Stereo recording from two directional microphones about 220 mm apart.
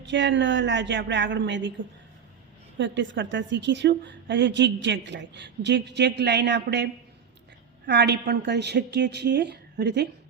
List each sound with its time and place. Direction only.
0.0 s a woman's voice: 55° right (ahead or behind)
2.7 s a woman's voice: 55° right (ahead or behind)